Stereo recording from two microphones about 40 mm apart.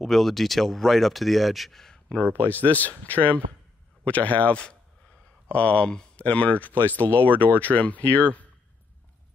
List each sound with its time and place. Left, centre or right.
0.0 s speech: centre
2.2 s speech: right
2.5 s speech: left